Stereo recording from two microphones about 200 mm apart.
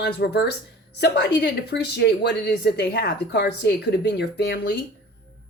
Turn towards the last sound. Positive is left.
turn(degrees=60)  # may be behind; listen again after turning